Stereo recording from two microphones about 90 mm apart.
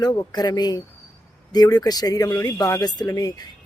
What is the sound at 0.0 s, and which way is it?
Speech, 45° left (ahead or behind).